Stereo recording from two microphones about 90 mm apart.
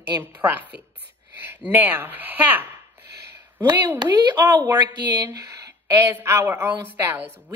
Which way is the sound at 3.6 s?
55° right (ahead or behind).